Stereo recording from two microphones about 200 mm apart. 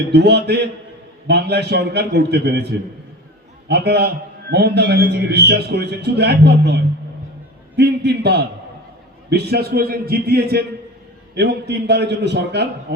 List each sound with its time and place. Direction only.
0.1 s a man's voice: 55° right (ahead or behind)